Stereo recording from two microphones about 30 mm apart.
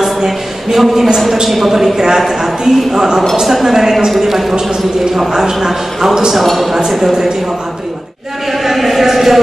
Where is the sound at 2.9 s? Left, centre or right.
Centre.